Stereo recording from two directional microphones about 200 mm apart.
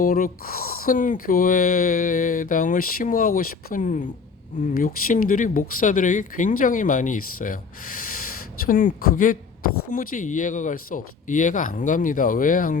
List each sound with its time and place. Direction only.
0.0 s speech: 45° left (ahead or behind)